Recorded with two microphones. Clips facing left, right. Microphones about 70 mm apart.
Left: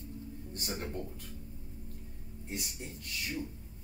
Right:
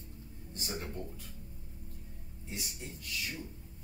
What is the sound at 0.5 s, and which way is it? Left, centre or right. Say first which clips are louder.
Speech: left 1 dB; left.